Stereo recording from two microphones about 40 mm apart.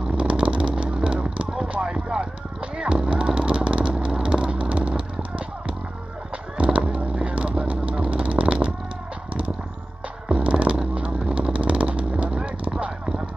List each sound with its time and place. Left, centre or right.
0.2 s vehicle: right
1.5 s a sound: right
2.8 s vehicle: right
6.6 s vehicle: right
10.2 s music: right
11.0 s vehicle: right
12.4 s a sound: right